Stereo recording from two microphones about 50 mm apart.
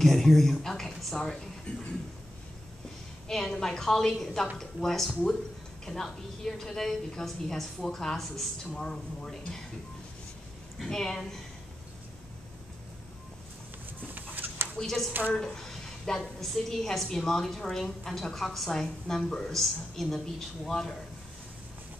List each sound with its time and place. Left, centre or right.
0.0 s speech: centre
1.7 s a sound: left
3.3 s a woman's voice: centre
10.8 s a woman's voice: centre
14.1 s a sound: right
14.8 s a woman's voice: centre